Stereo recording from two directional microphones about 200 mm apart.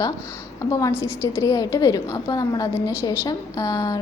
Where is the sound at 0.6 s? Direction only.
15° left (ahead or behind).